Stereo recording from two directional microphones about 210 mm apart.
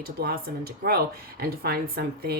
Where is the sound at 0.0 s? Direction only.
50° right (ahead or behind).